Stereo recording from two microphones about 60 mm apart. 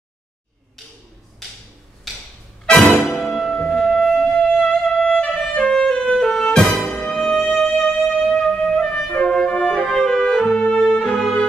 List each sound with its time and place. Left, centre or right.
2.6 s music: centre
3.5 s music: centre
4.9 s music: centre
6.9 s music: left
7.2 s music: centre
9.1 s brass instrument: centre
9.8 s music: centre